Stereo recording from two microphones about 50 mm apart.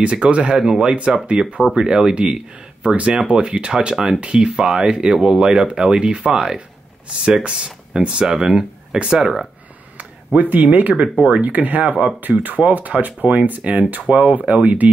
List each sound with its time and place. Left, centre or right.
0.0 s speech: right
9.9 s speech: right
14.6 s speech: right